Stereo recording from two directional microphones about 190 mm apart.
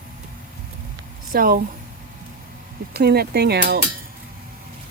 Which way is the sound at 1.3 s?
50° right (ahead or behind).